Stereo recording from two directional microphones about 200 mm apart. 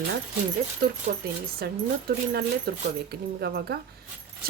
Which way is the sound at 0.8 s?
50° right (ahead or behind).